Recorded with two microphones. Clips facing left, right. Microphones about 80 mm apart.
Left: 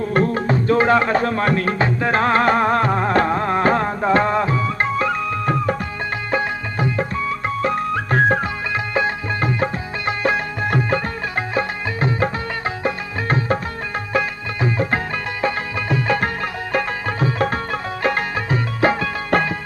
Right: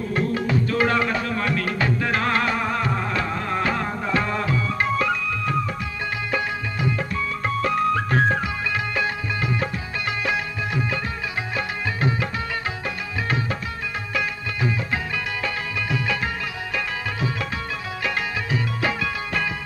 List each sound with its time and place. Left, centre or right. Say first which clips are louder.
0.1 s music: left 4 dB; left
2.5 s music: left 7 dB; left
12.0 s music: left 6 dB; left
19.3 s music: left 10 dB; left